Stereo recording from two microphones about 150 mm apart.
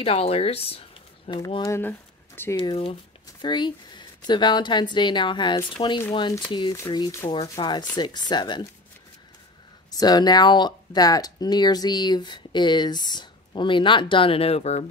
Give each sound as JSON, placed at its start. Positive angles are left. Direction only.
{"t": 0.0, "sound": "speech", "side_deg": 40}
{"t": 1.3, "sound": "speech", "side_deg": 30}
{"t": 1.8, "sound": "speech", "side_deg": 15}
{"t": 2.6, "sound": "speech", "side_deg": 35}
{"t": 9.8, "sound": "speech", "side_deg": 25}